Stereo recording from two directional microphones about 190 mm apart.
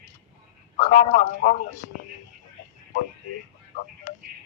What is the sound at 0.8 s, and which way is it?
Speech, 40° left (ahead or behind).